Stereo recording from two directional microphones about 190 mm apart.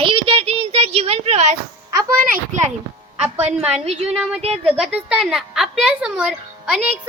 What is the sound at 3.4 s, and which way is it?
Speech, 35° right (ahead or behind).